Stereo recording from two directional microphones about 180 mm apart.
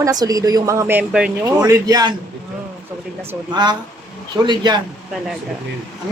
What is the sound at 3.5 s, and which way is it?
A man's voice, 25° right (ahead or behind).